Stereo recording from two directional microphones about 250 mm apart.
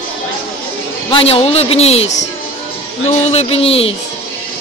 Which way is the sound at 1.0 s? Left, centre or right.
Left.